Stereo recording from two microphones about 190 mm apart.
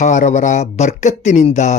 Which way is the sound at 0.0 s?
40° left (ahead or behind).